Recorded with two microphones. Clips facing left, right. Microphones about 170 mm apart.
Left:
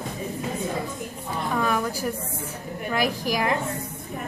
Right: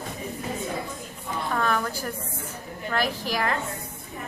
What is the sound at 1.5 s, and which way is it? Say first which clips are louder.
A woman's voice: left 1 dB; 10° left (ahead or behind).